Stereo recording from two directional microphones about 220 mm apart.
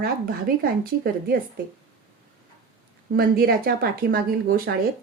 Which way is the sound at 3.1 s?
40° right (ahead or behind).